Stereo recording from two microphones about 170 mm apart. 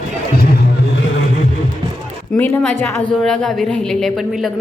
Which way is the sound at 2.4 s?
10° left (ahead or behind).